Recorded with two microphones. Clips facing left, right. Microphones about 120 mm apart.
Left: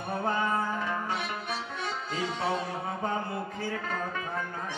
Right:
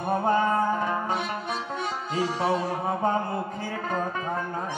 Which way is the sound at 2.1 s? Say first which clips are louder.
Right 6 dB; 45° right (ahead or behind).